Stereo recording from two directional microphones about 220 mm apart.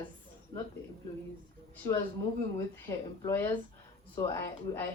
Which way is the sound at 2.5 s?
15° left (ahead or behind).